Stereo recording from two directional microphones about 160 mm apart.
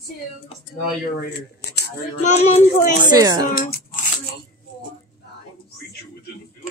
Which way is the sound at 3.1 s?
25° right (ahead or behind).